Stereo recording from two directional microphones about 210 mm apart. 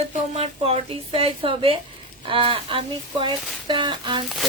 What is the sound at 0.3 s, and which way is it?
Speech, 30° right (ahead or behind).